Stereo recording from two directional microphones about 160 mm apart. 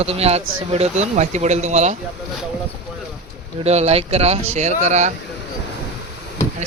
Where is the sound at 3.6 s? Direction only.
40° right (ahead or behind).